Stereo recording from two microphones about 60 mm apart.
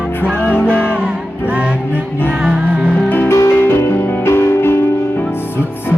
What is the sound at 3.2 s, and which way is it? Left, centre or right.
Music, left.